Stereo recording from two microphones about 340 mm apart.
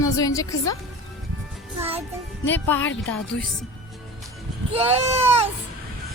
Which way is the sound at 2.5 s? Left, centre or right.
Centre.